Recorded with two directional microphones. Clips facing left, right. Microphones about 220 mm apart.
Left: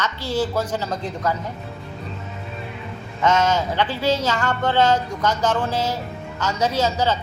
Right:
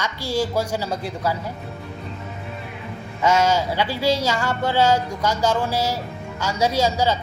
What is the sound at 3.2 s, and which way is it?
Speech, 10° right (ahead or behind).